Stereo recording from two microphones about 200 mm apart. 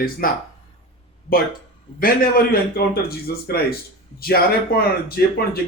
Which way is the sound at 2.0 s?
45° left (ahead or behind).